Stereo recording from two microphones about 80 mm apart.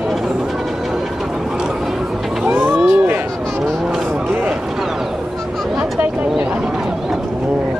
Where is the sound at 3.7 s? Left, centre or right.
Centre.